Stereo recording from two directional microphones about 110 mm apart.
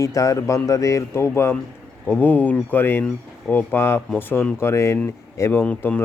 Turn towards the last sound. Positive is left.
turn(degrees=10)  # may be behind; listen again after turning